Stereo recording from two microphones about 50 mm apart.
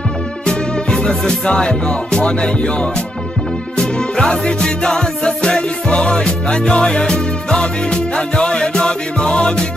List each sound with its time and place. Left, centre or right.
0.5 s music: centre